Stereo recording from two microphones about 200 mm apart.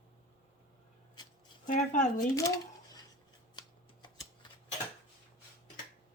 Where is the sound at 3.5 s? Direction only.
20° left (ahead or behind).